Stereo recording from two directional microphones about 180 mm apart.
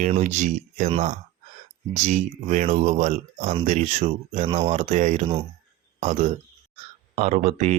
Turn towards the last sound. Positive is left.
turn(degrees=-35)  # may be behind; listen again after turning